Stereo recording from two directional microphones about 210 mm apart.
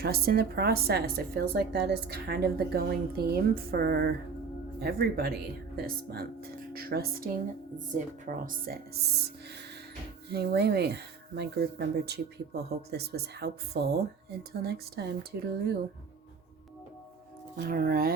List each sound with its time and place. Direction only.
0.0 s speech: 50° right (ahead or behind)
10.2 s speech: 50° right (ahead or behind)
17.7 s speech: 45° right (ahead or behind)